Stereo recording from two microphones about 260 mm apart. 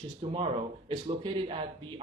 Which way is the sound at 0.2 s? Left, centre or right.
Right.